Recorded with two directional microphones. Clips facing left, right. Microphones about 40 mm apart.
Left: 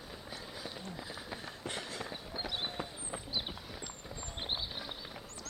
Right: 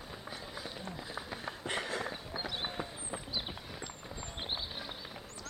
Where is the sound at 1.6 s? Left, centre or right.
Right.